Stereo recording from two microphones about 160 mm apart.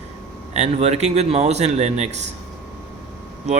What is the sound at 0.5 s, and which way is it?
Speech, 45° right (ahead or behind).